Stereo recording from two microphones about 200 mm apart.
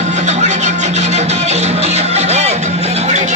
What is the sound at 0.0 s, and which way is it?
Music, 35° right (ahead or behind).